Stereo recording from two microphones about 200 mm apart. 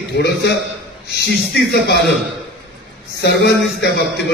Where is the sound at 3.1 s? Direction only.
55° left (ahead or behind).